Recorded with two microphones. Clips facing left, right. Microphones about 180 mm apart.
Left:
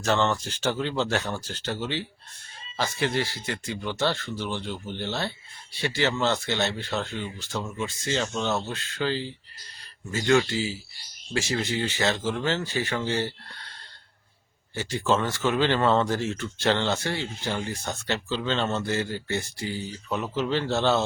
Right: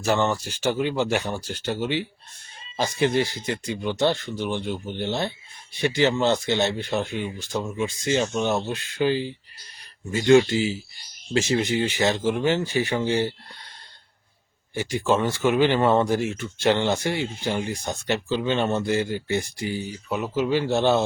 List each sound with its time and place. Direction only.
0.0 s speech: 10° right (ahead or behind)
14.8 s speech: 15° right (ahead or behind)